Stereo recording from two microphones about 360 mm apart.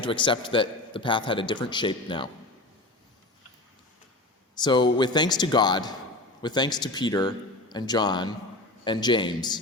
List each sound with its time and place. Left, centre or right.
0.0 s a man's voice: centre
4.5 s a man's voice: centre